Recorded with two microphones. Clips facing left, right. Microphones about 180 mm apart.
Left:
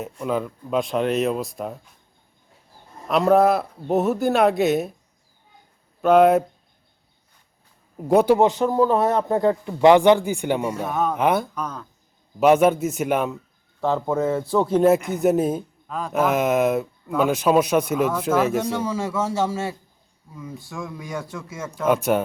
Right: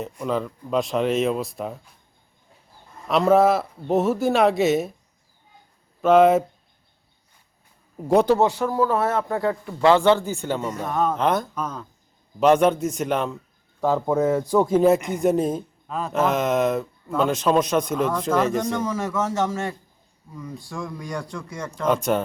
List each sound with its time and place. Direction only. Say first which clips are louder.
0.0 s speech: even; 5° left (ahead or behind)
3.1 s speech: even; centre (ahead or behind)
6.0 s speech: even; centre (ahead or behind)
7.9 s speech: left 1 dB; 5° left (ahead or behind)
8.4 s speech: left 3 dB; 20° left (ahead or behind)
11.5 s speech: right 1 dB; 5° right (ahead or behind)
12.4 s speech: left 1 dB; 5° left (ahead or behind)
13.8 s speech: right 1 dB; 10° right (ahead or behind)
14.8 s speech: left 1 dB; 5° left (ahead or behind)